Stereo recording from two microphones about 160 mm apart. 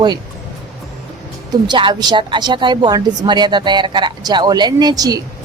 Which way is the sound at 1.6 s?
30° right (ahead or behind).